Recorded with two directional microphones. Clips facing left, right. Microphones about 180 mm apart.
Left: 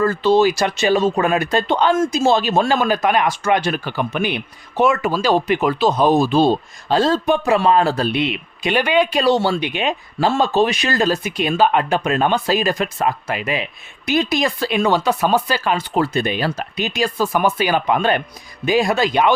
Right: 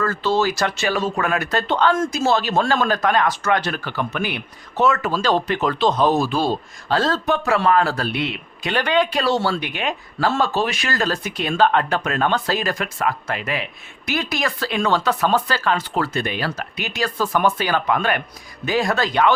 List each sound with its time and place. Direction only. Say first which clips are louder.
0.0 s speech: left 6 dB; 15° left (ahead or behind)
13.2 s speech: left 3 dB; 10° left (ahead or behind)